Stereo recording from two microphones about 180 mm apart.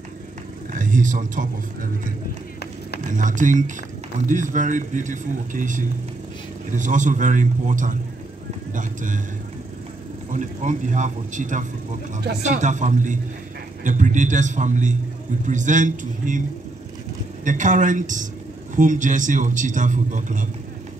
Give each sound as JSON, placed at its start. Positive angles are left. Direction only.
{"t": 0.7, "sound": "a man's voice", "side_deg": -45}
{"t": 10.3, "sound": "a man's voice", "side_deg": -45}
{"t": 17.5, "sound": "a man's voice", "side_deg": -45}